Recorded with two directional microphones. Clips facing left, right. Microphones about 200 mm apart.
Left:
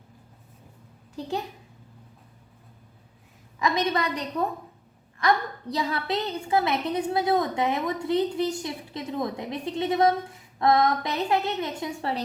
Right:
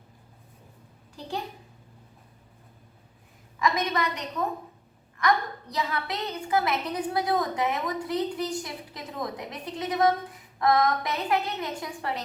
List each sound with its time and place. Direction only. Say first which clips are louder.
3.6 s a woman's voice: left 1 dB; 30° left (ahead or behind)